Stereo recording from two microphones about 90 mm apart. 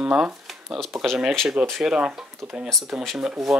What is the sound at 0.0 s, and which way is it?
Shuffling cards, 10° right (ahead or behind).